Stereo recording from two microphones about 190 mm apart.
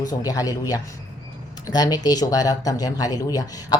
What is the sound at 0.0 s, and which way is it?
Speech, 20° left (ahead or behind).